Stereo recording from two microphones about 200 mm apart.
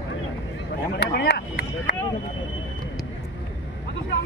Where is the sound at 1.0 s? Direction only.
55° left (ahead or behind).